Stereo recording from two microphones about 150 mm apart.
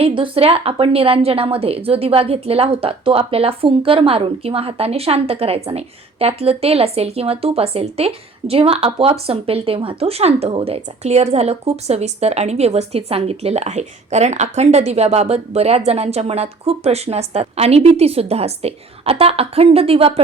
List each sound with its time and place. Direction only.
0.0 s a woman's voice: 40° right (ahead or behind)